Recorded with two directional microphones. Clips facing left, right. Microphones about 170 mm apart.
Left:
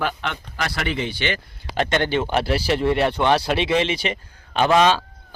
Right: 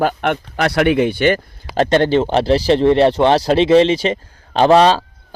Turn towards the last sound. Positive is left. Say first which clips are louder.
# right 6 dB
turn(degrees=-35)  # may be behind; listen again after turning